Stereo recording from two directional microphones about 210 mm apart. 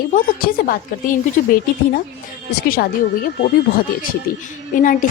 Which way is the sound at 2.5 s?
45° left (ahead or behind).